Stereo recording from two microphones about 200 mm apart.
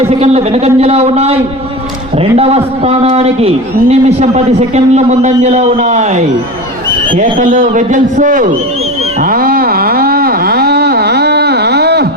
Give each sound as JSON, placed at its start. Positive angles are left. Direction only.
{"t": 0.2, "sound": "a man's voice", "side_deg": -30}
{"t": 2.4, "sound": "a man's voice", "side_deg": -30}
{"t": 9.2, "sound": "a sound", "side_deg": -45}